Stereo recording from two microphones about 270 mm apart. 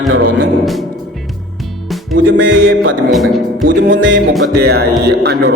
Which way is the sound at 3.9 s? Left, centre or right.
Right.